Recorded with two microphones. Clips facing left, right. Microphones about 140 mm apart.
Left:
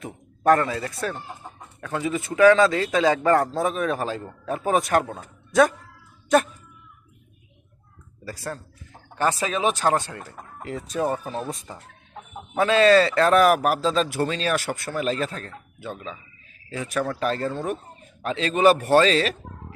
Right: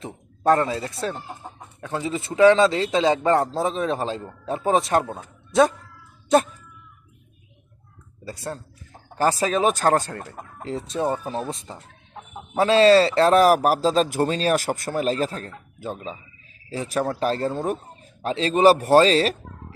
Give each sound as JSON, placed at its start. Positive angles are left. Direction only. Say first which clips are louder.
{"t": 0.0, "sound": "a man's voice", "louder": "even", "side_deg": -25}
{"t": 8.2, "sound": "a man's voice", "louder": "right 1 dB", "side_deg": -25}
{"t": 9.1, "sound": "speech", "louder": "right 3 dB", "side_deg": -35}
{"t": 10.6, "sound": "a man's voice", "louder": "right 1 dB", "side_deg": -30}